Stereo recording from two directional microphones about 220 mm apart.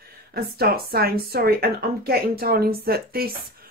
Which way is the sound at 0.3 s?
45° right (ahead or behind).